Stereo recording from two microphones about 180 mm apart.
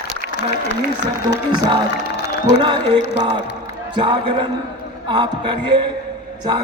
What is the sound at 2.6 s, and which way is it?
Speech, 25° right (ahead or behind).